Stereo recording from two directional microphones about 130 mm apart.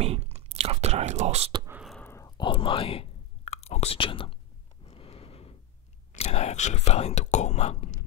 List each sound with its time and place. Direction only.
0.0 s whispering: 55° right (ahead or behind)
2.0 s sigh: 20° left (ahead or behind)
2.3 s whispering: 40° left (ahead or behind)
4.8 s a sound: 50° left (ahead or behind)
6.1 s speech: 60° left (ahead or behind)